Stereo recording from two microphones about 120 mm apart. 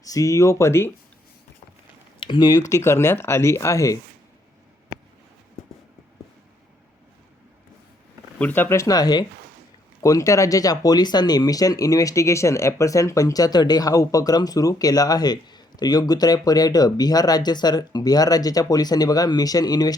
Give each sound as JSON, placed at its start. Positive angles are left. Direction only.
{"t": 0.0, "sound": "speech", "side_deg": 30}
{"t": 2.2, "sound": "speech", "side_deg": 35}
{"t": 8.4, "sound": "speech", "side_deg": 15}